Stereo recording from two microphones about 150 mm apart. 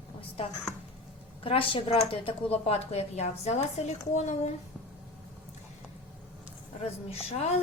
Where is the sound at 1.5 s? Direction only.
40° left (ahead or behind).